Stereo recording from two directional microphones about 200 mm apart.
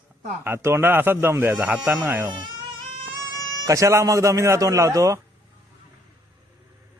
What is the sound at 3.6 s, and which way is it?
Speech, 15° right (ahead or behind).